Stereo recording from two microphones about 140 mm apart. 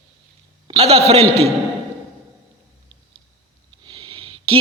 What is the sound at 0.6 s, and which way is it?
Speech, 45° right (ahead or behind).